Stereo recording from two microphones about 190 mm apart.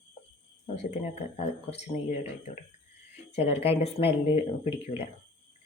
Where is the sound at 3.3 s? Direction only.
35° left (ahead or behind).